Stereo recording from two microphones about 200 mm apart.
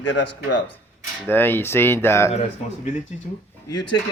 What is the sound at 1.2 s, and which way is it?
Speech, 10° left (ahead or behind).